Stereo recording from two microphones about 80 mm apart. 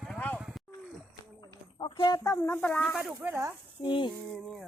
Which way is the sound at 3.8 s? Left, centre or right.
Left.